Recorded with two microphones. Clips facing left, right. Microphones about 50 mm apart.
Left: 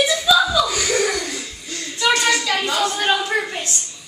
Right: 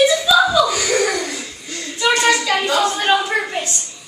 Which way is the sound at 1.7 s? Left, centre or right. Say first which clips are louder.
Right 1 dB; centre.